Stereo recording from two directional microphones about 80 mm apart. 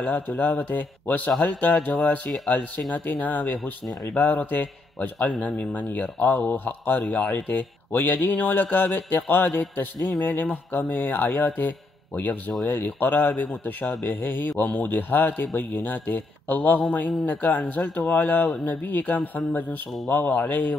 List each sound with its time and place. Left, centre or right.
0.0 s a man's voice: centre